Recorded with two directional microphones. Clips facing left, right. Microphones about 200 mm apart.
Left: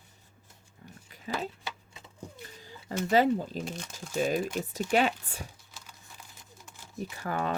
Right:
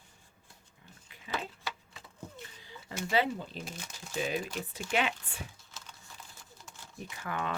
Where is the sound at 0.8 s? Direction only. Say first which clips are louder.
Left 8 dB; 40° left (ahead or behind).